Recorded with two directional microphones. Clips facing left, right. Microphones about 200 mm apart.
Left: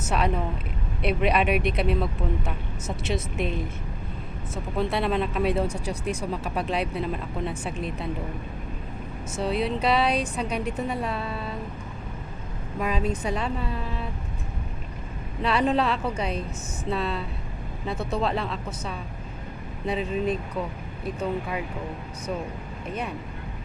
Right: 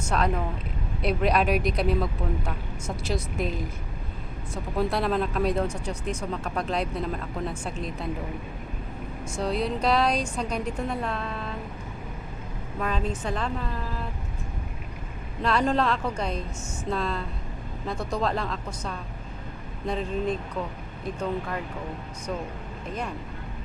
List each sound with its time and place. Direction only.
0.0 s a woman's voice: 5° left (ahead or behind)
9.3 s a woman's voice: 5° left (ahead or behind)
12.8 s speech: 10° left (ahead or behind)
15.4 s a woman's voice: 5° left (ahead or behind)